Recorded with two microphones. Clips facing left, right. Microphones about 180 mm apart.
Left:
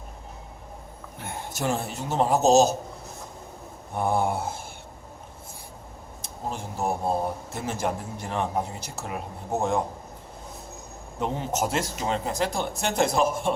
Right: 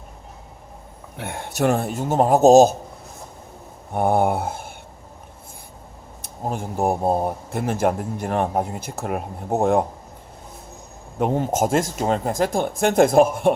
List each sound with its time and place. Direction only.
1.1 s speech: 75° right (ahead or behind); by 2.7 s 50° right (ahead or behind)
3.9 s speech: 60° right (ahead or behind)
6.2 s speech: 55° right (ahead or behind)
11.2 s speech: 50° right (ahead or behind)